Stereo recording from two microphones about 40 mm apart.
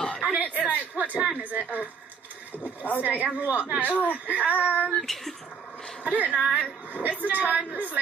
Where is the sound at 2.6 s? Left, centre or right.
Left.